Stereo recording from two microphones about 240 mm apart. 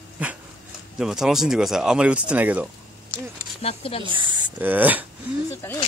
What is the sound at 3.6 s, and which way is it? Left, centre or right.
Speech, left.